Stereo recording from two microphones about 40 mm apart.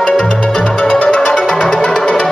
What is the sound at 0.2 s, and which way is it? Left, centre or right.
Music, left.